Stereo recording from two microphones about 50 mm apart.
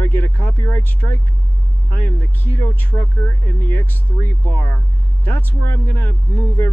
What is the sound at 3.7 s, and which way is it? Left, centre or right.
Speech, left.